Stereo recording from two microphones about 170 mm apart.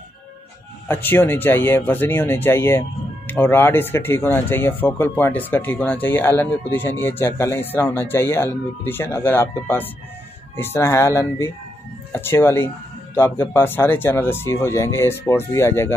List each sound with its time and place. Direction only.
0.8 s speech: 10° left (ahead or behind)